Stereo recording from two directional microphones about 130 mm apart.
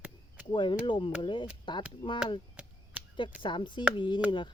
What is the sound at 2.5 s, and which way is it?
Chop, 10° right (ahead or behind).